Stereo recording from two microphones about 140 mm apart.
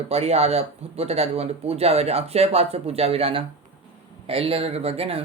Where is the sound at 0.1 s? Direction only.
50° right (ahead or behind).